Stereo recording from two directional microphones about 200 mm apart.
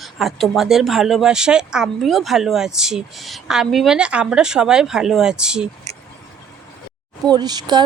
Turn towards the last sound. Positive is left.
turn(degrees=-20)  # may be behind; listen again after turning